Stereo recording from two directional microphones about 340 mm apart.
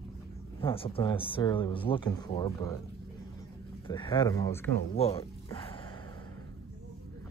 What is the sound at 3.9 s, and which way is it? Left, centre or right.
Speech, centre.